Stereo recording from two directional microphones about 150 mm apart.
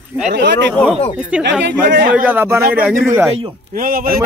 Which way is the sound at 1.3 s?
10° right (ahead or behind).